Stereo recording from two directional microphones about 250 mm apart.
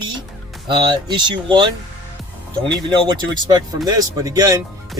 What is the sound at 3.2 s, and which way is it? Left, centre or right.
Speech, centre.